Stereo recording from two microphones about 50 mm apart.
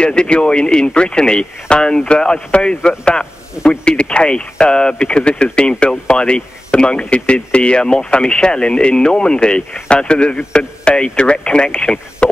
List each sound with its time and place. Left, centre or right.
0.0 s speech: centre